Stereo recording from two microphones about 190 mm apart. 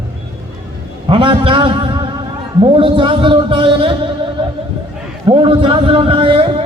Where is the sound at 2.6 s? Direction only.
25° right (ahead or behind).